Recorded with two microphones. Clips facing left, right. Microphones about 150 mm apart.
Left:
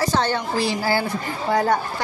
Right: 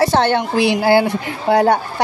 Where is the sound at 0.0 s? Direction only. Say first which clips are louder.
Right 7 dB; 65° right (ahead or behind).